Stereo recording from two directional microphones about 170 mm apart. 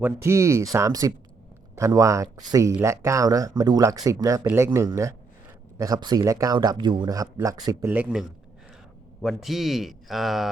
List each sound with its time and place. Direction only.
0.0 s speech: 15° right (ahead or behind)
7.9 s speech: 10° right (ahead or behind)